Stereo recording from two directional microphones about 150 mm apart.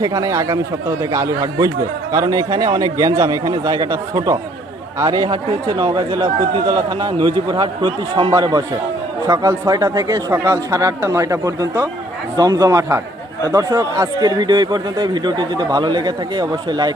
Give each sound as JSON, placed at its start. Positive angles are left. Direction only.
{"t": 0.0, "sound": "speech", "side_deg": -25}